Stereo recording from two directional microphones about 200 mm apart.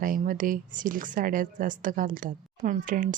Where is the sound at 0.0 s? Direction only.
45° right (ahead or behind).